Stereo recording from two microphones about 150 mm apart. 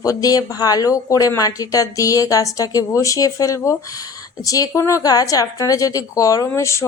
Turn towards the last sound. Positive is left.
turn(degrees=20)  # may be behind; listen again after turning